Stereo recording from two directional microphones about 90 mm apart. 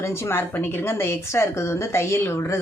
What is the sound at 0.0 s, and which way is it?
Speech, 25° left (ahead or behind).